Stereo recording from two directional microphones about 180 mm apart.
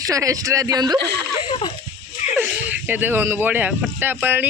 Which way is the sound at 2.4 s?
10° right (ahead or behind).